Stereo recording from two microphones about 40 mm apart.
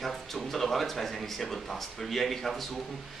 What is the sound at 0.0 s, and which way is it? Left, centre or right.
A man's voice, centre.